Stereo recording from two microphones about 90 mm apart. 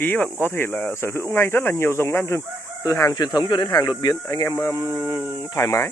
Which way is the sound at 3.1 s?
50° left (ahead or behind).